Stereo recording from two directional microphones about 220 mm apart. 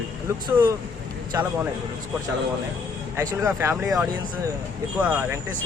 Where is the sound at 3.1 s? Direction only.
15° right (ahead or behind).